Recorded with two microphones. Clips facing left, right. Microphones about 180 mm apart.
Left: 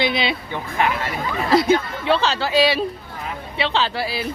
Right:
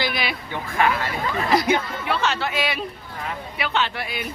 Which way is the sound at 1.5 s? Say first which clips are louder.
Left 5 dB; 25° left (ahead or behind).